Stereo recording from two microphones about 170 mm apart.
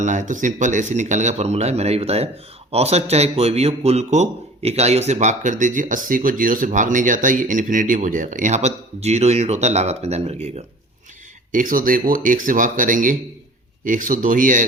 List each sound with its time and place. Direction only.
0.0 s a man's voice: 45° right (ahead or behind)
11.5 s speech: 55° right (ahead or behind)